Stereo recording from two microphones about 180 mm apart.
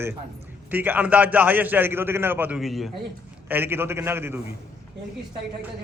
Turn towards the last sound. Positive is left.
turn(degrees=-10)  # may be behind; listen again after turning